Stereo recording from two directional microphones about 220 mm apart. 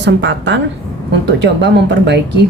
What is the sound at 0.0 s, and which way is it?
Speech, 55° right (ahead or behind).